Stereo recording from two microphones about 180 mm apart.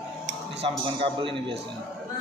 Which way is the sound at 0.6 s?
30° right (ahead or behind).